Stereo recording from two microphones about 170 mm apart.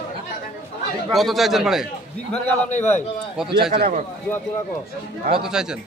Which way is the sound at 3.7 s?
60° right (ahead or behind).